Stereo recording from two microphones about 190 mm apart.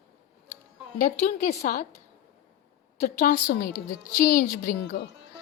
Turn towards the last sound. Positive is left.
turn(degrees=50)  # may be behind; listen again after turning